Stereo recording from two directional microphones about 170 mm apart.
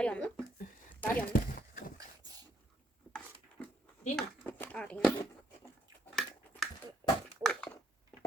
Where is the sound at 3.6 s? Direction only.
5° left (ahead or behind).